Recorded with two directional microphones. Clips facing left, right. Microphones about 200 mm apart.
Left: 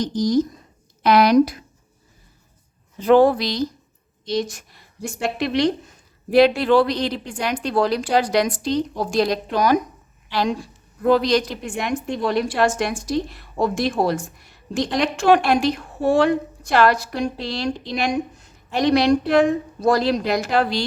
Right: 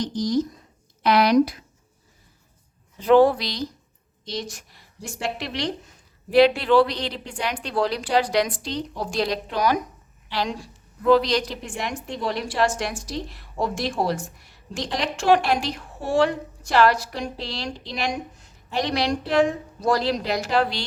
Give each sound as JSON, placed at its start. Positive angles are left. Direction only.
{"t": 0.0, "sound": "a woman's voice", "side_deg": 40}
{"t": 3.0, "sound": "a woman's voice", "side_deg": 50}
{"t": 11.0, "sound": "a woman's voice", "side_deg": 50}